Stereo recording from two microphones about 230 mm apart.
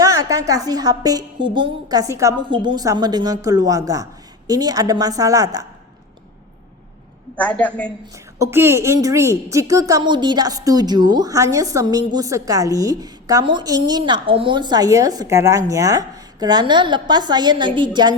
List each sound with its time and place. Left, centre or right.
0.0 s a woman's voice: centre
7.3 s a woman's voice: centre
8.1 s a woman's voice: centre